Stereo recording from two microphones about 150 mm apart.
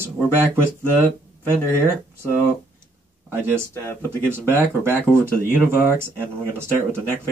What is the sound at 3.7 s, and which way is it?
Speech, 15° left (ahead or behind).